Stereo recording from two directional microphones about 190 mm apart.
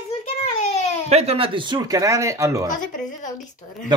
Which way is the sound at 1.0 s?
35° right (ahead or behind).